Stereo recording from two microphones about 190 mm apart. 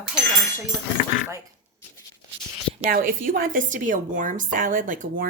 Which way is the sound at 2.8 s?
45° right (ahead or behind).